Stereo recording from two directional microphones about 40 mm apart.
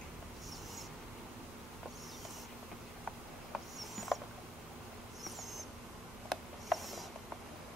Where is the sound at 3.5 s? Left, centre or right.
Centre.